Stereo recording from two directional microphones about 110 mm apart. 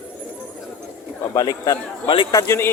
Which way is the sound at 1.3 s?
35° left (ahead or behind).